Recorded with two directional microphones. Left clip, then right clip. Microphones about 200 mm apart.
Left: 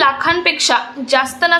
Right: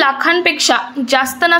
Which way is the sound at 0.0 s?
15° right (ahead or behind).